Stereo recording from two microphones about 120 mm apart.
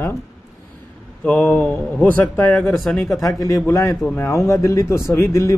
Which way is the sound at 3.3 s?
25° left (ahead or behind).